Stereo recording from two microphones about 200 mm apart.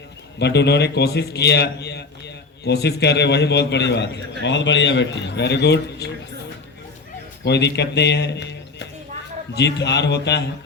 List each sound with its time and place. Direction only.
0.3 s a man's voice: 60° left (ahead or behind)
7.4 s a man's voice: 60° left (ahead or behind)